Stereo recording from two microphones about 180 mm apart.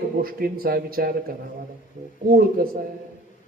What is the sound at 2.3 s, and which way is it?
Speech, 55° right (ahead or behind).